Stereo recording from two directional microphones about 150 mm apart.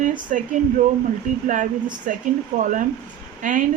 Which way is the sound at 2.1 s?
65° right (ahead or behind).